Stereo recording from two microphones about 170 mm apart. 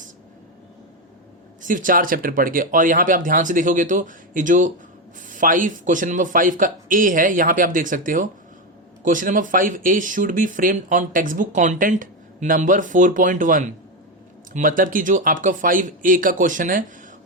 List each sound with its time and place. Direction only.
1.6 s speech: 50° right (ahead or behind)